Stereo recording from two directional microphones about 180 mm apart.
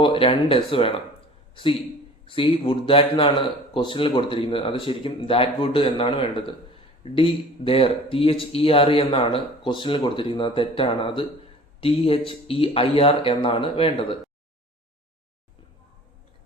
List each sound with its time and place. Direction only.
0.0 s speech: 30° left (ahead or behind)
2.2 s speech: 30° left (ahead or behind)